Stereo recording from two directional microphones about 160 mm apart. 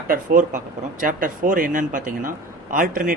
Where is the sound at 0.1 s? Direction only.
55° right (ahead or behind).